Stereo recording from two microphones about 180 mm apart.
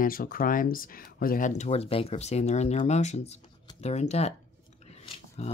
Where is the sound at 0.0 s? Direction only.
55° left (ahead or behind).